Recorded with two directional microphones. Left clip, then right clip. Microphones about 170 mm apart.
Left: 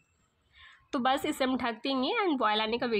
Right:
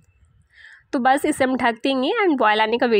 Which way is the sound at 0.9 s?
35° right (ahead or behind).